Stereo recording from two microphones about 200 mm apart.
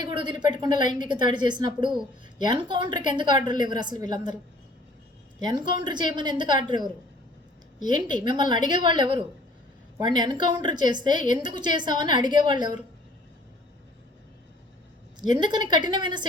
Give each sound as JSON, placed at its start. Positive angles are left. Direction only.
{"t": 0.0, "sound": "a woman's voice", "side_deg": -20}
{"t": 5.4, "sound": "a woman's voice", "side_deg": -20}
{"t": 15.3, "sound": "a woman's voice", "side_deg": -20}